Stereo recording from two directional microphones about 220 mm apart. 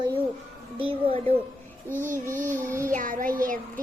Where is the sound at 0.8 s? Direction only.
25° right (ahead or behind).